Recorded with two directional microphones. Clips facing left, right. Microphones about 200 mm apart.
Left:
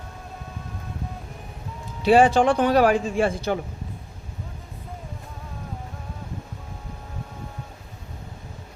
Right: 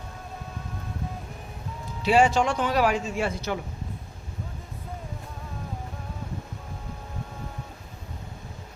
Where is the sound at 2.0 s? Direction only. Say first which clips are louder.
Left 5 dB; 55° left (ahead or behind).